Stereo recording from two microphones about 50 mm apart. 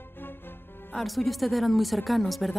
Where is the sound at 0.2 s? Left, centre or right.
Left.